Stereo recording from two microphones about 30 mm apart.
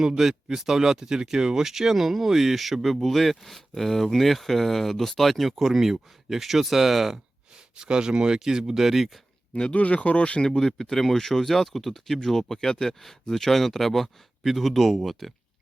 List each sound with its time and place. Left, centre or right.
0.2 s speech: centre
7.8 s speech: right
8.8 s speech: centre
9.7 s speech: left
10.4 s speech: left; by 15.3 s centre